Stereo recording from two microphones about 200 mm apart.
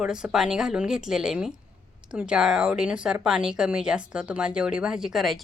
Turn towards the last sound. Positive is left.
turn(degrees=0)  # may be behind; listen again after turning